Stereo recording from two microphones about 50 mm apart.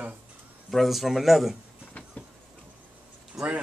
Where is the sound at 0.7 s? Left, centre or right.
Centre.